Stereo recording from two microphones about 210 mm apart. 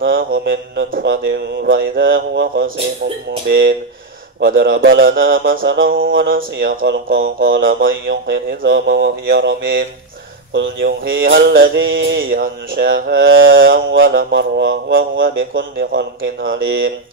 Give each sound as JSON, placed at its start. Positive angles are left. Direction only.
{"t": 0.3, "sound": "mantra", "side_deg": -60}
{"t": 7.8, "sound": "mantra", "side_deg": -50}
{"t": 15.8, "sound": "a man's voice", "side_deg": -45}
{"t": 16.4, "sound": "mantra", "side_deg": -55}